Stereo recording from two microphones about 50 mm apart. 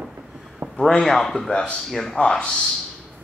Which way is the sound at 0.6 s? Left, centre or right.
Right.